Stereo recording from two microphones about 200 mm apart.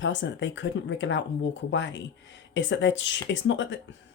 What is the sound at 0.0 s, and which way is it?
Speech, 65° left (ahead or behind).